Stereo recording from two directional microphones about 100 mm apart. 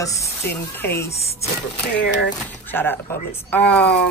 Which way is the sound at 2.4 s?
20° left (ahead or behind).